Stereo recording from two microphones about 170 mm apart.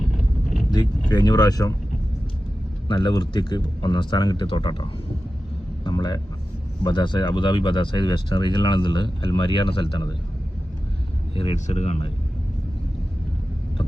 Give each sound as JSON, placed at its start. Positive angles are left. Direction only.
{"t": 0.7, "sound": "speech", "side_deg": 25}
{"t": 2.8, "sound": "speech", "side_deg": 30}
{"t": 5.8, "sound": "vehicle", "side_deg": 25}
{"t": 6.8, "sound": "speech", "side_deg": 30}
{"t": 11.3, "sound": "speech", "side_deg": 35}